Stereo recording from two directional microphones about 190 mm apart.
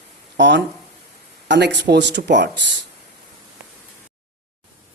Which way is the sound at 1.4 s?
65° right (ahead or behind).